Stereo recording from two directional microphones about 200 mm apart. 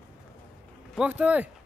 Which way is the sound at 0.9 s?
5° right (ahead or behind).